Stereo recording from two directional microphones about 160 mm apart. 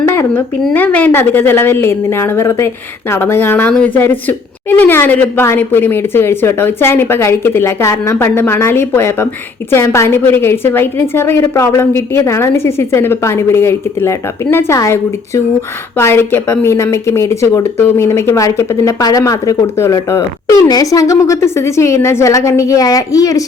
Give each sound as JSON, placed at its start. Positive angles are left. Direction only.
{"t": 0.1, "sound": "a woman's voice", "side_deg": 15}